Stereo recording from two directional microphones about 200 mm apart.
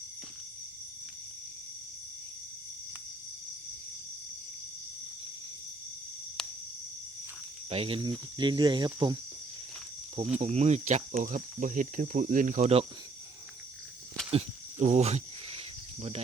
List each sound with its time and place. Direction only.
6.4 s a sound: 5° left (ahead or behind)
7.7 s speech: 30° right (ahead or behind)
10.4 s speech: 35° right (ahead or behind)
14.3 s cricket: 30° right (ahead or behind)